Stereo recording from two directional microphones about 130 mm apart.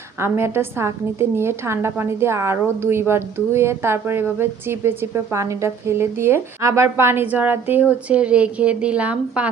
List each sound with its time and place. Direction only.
0.2 s a woman's voice: 20° right (ahead or behind)